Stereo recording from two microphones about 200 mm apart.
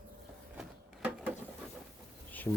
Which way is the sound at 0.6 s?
5° right (ahead or behind).